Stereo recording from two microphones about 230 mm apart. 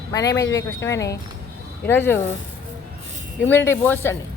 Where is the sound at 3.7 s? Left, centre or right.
Centre.